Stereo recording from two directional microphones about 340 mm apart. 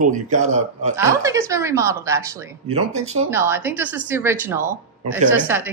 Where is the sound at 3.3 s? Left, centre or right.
Centre.